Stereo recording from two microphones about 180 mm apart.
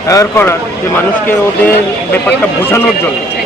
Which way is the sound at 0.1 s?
15° left (ahead or behind).